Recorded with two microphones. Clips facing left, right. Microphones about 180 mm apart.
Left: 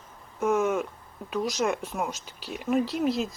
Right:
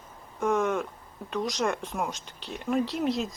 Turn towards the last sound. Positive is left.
turn(degrees=0)  # may be behind; listen again after turning